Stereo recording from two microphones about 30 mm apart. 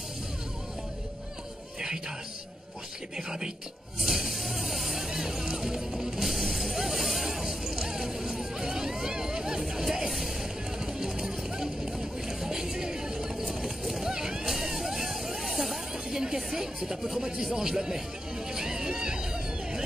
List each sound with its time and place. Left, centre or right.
3.2 s speech: right
4.0 s music: centre
5.1 s music: centre
6.2 s vehicle: centre
7.2 s music: centre
10.9 s a sound: centre
13.6 s a sound: centre
14.1 s vehicle: right
14.5 s vehicle: centre
16.1 s chatter: right
16.5 s speech: centre
18.5 s hubbub: centre